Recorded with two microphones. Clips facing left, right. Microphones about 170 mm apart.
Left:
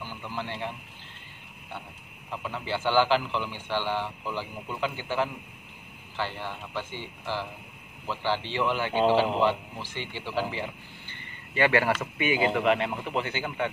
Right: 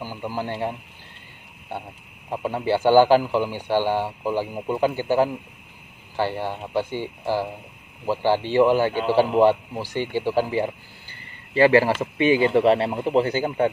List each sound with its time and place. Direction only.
0.0 s speech: 40° right (ahead or behind)
2.2 s a man's voice: 45° right (ahead or behind)
11.5 s speech: 30° right (ahead or behind)